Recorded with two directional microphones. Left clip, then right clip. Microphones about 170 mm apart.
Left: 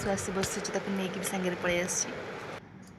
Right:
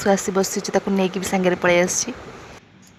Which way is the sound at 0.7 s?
60° right (ahead or behind).